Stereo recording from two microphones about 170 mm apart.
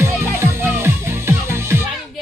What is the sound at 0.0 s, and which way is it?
Music, 15° right (ahead or behind).